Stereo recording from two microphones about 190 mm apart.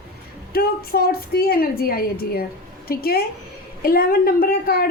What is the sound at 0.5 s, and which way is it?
A woman's voice, 55° left (ahead or behind).